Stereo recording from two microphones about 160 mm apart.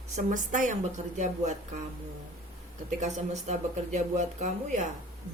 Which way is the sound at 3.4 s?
45° right (ahead or behind).